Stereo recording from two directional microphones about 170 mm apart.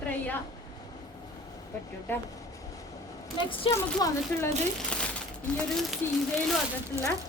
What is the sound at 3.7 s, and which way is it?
Speech, 15° left (ahead or behind).